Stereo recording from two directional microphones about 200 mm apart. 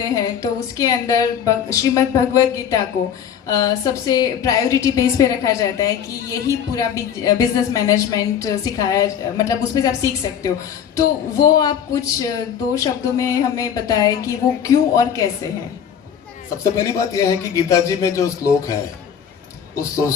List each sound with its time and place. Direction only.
0.0 s a woman's voice: 15° left (ahead or behind)
16.7 s a woman's voice: 15° left (ahead or behind)